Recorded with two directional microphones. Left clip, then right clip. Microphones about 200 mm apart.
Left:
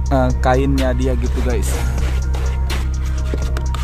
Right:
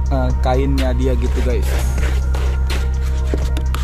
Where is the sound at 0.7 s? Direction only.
5° left (ahead or behind).